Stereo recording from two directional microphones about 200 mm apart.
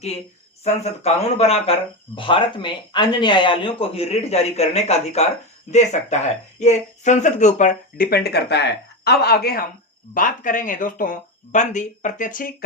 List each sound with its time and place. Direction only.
0.6 s speech: 30° left (ahead or behind)